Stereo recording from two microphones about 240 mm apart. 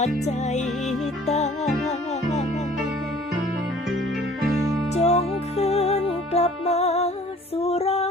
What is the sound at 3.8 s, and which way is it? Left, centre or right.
Music, centre.